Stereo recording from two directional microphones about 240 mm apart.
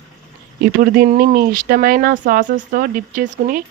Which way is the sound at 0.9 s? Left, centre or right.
Right.